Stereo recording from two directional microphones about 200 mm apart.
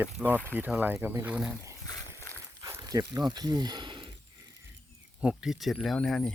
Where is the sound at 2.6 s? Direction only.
15° right (ahead or behind).